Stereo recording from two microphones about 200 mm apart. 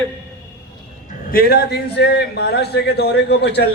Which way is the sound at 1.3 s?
50° left (ahead or behind).